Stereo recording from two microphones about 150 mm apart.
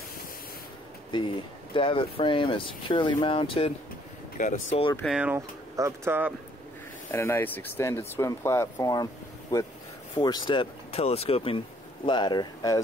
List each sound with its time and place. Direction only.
1.1 s speech: 35° left (ahead or behind)
4.4 s speech: 55° left (ahead or behind)
5.2 s speech: 15° right (ahead or behind)
7.1 s speech: 15° left (ahead or behind)